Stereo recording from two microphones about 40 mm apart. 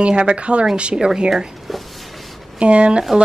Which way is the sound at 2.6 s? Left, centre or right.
Right.